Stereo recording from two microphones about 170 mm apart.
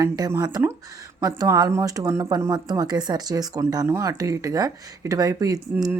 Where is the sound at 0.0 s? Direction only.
15° right (ahead or behind).